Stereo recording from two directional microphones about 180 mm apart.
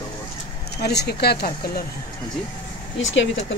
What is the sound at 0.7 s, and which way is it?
Speech, 65° left (ahead or behind).